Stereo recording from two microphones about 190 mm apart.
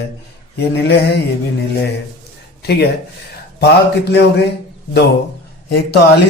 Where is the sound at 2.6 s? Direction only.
55° left (ahead or behind).